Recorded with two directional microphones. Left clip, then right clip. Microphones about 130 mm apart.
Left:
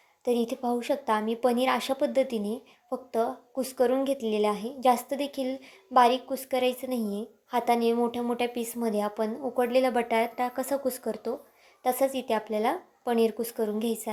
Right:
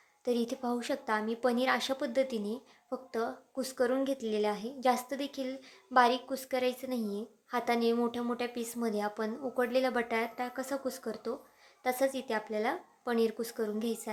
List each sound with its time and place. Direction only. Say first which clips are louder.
0.3 s speech: left 5 dB; 10° left (ahead or behind)
1.0 s speech: left 4 dB; 20° left (ahead or behind)
5.9 s speech: left 5 dB; 10° left (ahead or behind)